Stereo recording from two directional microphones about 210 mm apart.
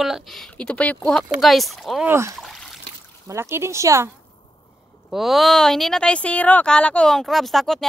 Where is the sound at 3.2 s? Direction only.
15° right (ahead or behind).